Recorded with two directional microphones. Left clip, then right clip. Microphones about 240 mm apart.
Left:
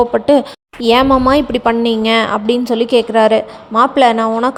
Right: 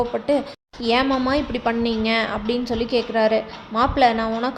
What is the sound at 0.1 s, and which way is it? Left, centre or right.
A woman's voice, left.